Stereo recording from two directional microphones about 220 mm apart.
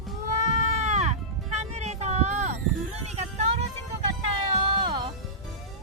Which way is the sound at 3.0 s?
30° right (ahead or behind).